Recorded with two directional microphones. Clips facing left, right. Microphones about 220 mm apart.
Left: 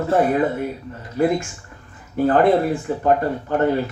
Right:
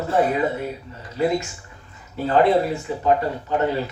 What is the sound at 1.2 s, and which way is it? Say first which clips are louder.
Speech: left 2 dB; 50° left (ahead or behind).